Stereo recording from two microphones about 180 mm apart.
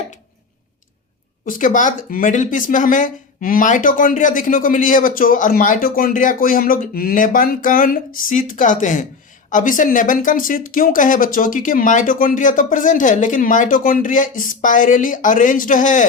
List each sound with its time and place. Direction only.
1.5 s speech: 45° left (ahead or behind)